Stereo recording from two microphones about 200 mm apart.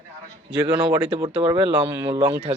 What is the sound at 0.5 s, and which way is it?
Speech, 20° right (ahead or behind).